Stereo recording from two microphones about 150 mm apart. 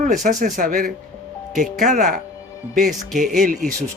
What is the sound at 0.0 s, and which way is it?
Speech, 55° right (ahead or behind).